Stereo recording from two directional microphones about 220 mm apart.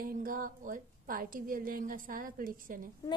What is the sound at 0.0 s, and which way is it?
A woman's voice, 40° right (ahead or behind).